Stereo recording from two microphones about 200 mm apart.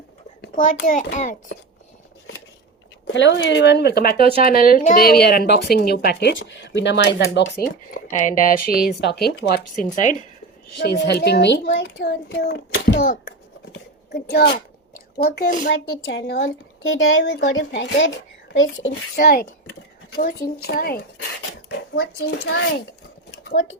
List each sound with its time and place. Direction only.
0.4 s a child's voice: 45° left (ahead or behind)
3.1 s a woman's voice: 65° left (ahead or behind)
8.2 s speech: 40° left (ahead or behind)
9.9 s a child's voice: 40° left (ahead or behind)
10.8 s a woman's voice: 55° left (ahead or behind)
13.7 s a sound: 55° left (ahead or behind)
15.2 s speech: 45° left (ahead or behind)
15.7 s a woman's voice: 60° left (ahead or behind)
18.5 s a child's voice: 75° left (ahead or behind)
19.1 s speech: 50° left (ahead or behind)
22.3 s a woman's voice: 60° left (ahead or behind)
23.5 s speech: 70° left (ahead or behind)